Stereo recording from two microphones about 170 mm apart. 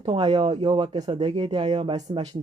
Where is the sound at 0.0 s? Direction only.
30° right (ahead or behind).